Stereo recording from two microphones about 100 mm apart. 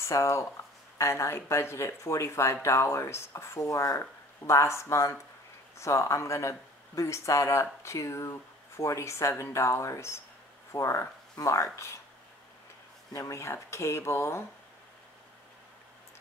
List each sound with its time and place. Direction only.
0.0 s speech: 30° left (ahead or behind)
13.1 s speech: 30° left (ahead or behind)